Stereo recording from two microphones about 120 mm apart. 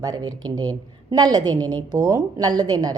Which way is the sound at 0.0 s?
30° right (ahead or behind).